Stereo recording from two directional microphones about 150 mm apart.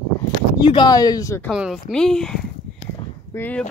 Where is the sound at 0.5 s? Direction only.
30° left (ahead or behind).